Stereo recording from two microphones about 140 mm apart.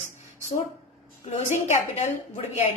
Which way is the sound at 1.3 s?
55° left (ahead or behind).